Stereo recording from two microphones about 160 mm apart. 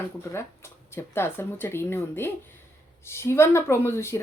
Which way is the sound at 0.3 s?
15° left (ahead or behind).